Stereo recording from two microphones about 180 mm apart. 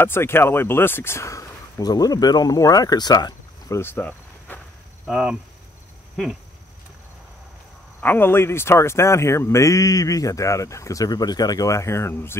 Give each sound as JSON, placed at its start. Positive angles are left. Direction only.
{"t": 0.0, "sound": "speech", "side_deg": 15}
{"t": 5.0, "sound": "speech", "side_deg": -5}
{"t": 8.0, "sound": "speech", "side_deg": 10}